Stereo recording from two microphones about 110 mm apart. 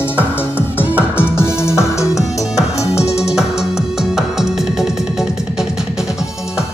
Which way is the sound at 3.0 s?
75° left (ahead or behind).